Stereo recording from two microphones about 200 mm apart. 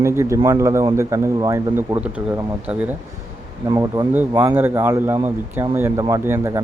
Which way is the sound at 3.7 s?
20° right (ahead or behind).